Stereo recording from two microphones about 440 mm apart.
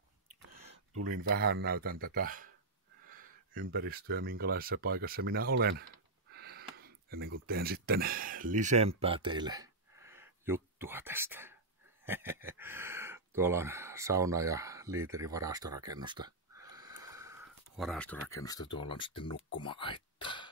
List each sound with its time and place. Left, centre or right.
0.9 s speech: right
6.3 s a sound: right
7.4 s speech: right; by 20.4 s centre